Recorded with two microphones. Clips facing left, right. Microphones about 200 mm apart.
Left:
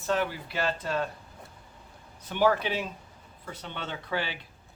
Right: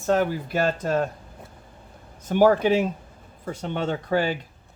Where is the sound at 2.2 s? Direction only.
45° right (ahead or behind).